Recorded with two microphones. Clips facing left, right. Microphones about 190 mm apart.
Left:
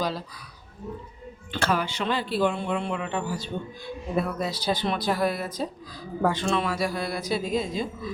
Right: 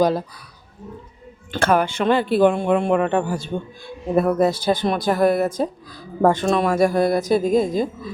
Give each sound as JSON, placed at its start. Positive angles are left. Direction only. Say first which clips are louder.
{"t": 0.0, "sound": "speech", "louder": "right 11 dB", "side_deg": -50}
{"t": 1.5, "sound": "speech", "louder": "right 8 dB", "side_deg": -50}